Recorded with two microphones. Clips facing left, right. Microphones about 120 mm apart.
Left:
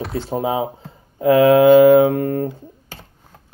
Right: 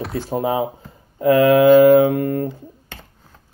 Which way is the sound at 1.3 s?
25° left (ahead or behind).